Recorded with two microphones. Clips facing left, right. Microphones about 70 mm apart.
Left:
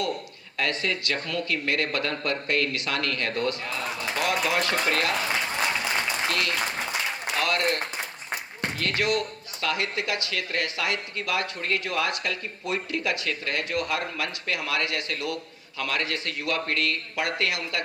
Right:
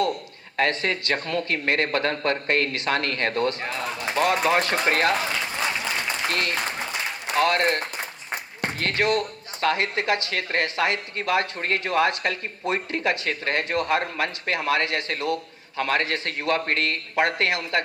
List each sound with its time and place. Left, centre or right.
0.5 s a man's voice: right